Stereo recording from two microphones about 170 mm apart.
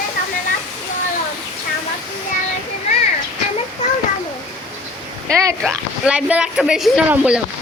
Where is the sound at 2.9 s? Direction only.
40° left (ahead or behind).